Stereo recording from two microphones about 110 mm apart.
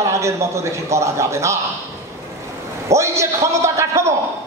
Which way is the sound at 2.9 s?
25° right (ahead or behind).